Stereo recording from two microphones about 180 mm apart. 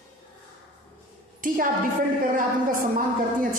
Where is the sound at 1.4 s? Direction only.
50° right (ahead or behind).